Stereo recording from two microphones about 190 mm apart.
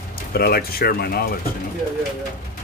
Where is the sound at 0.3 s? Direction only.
55° left (ahead or behind).